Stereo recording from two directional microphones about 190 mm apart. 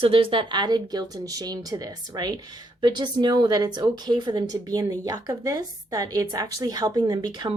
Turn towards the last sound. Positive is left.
turn(degrees=-20)  # may be behind; listen again after turning